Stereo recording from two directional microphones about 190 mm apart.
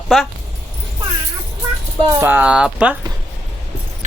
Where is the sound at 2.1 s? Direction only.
10° right (ahead or behind).